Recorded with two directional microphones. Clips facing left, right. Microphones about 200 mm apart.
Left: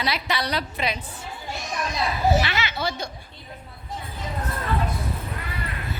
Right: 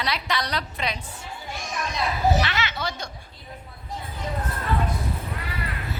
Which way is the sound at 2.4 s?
10° left (ahead or behind).